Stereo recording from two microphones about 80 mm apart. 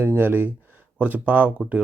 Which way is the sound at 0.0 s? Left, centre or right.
Right.